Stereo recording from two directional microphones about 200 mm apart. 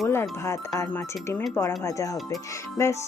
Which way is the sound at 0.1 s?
15° left (ahead or behind).